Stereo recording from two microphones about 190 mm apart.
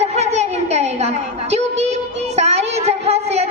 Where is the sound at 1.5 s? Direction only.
35° right (ahead or behind).